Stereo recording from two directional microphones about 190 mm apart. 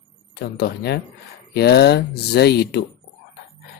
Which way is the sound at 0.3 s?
55° left (ahead or behind).